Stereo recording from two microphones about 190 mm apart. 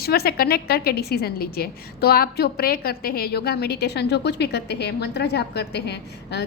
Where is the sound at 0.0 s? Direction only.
55° left (ahead or behind).